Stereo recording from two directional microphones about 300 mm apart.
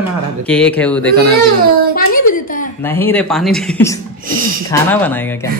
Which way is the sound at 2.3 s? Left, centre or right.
Left.